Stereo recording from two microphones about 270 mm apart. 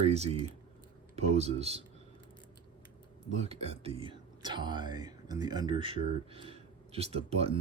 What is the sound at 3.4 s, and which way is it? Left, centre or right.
Speech, right.